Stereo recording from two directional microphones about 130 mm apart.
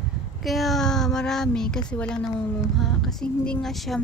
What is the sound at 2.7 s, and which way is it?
Child singing, centre (ahead or behind).